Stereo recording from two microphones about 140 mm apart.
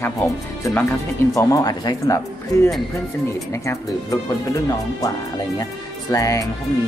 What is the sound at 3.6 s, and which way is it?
Speech, 25° left (ahead or behind).